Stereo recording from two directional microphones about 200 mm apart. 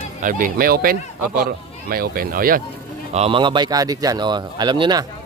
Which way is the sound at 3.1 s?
30° right (ahead or behind).